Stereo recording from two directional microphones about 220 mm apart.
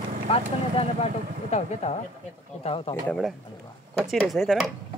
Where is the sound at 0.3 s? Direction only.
25° left (ahead or behind).